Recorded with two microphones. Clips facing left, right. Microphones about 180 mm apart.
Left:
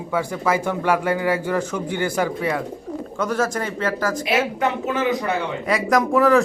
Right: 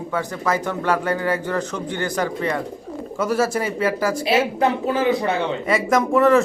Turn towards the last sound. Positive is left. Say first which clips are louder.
# right 1 dB
turn(degrees=0)  # may be behind; listen again after turning